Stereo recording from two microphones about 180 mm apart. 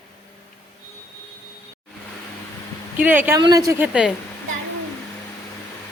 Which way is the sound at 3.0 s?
10° right (ahead or behind).